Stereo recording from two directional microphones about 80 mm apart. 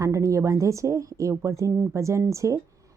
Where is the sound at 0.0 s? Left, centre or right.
Right.